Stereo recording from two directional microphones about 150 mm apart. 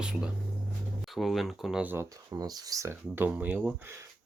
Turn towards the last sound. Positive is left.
turn(degrees=-10)  # may be behind; listen again after turning